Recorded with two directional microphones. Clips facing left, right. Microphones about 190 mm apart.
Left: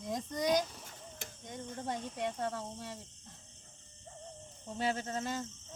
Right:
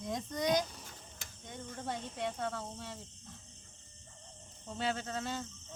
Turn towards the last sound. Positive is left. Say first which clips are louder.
# left 1 dB
turn(degrees=45)  # may be behind; listen again after turning